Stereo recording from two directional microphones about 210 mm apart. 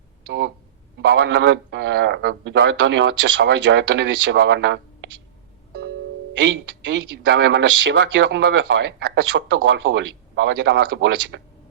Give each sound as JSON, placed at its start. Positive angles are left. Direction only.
{"t": 0.9, "sound": "a man's voice", "side_deg": -55}
{"t": 6.4, "sound": "a man's voice", "side_deg": -55}